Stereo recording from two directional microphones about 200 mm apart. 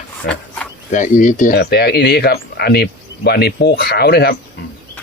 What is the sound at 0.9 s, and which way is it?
Speech, 40° left (ahead or behind).